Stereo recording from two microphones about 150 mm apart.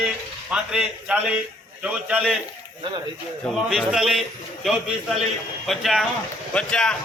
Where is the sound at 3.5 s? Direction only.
5° right (ahead or behind).